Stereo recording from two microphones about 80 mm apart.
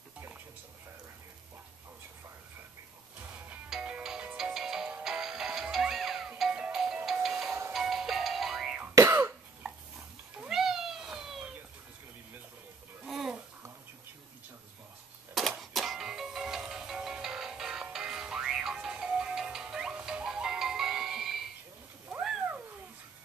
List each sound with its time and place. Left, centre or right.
3.7 s music: centre
8.9 s throat clearing: right
10.4 s cat: centre
13.0 s a sound: centre
15.6 s music: centre